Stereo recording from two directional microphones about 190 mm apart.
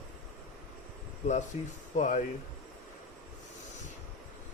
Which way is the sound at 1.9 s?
40° left (ahead or behind).